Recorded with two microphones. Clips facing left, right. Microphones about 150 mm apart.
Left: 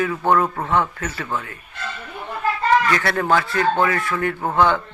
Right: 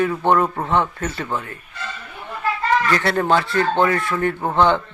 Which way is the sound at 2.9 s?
25° right (ahead or behind).